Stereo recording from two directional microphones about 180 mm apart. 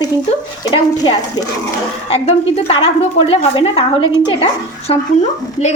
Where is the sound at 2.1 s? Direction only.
35° left (ahead or behind).